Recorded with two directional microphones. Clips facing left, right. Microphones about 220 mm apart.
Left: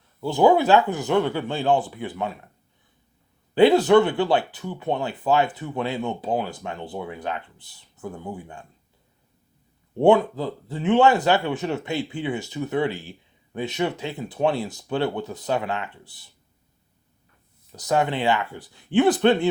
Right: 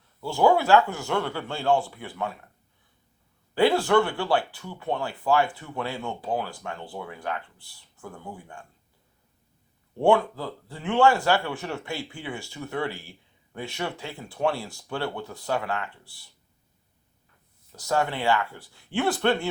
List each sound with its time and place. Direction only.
0.2 s speech: 20° left (ahead or behind)
3.5 s speech: 20° left (ahead or behind)
10.0 s speech: 20° left (ahead or behind)
17.7 s speech: 20° left (ahead or behind)